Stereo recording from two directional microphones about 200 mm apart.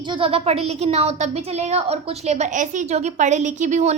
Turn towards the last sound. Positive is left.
turn(degrees=-35)  # may be behind; listen again after turning